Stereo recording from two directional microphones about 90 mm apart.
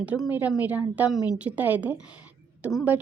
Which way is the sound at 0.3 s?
20° right (ahead or behind).